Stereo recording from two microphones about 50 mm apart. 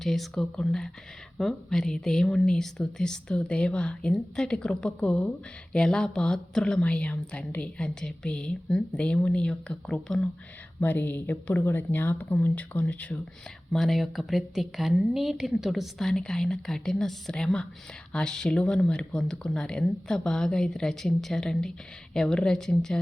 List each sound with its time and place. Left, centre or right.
0.0 s a woman's voice: centre
10.8 s a woman's voice: left
13.7 s speech: centre
16.0 s a woman's voice: centre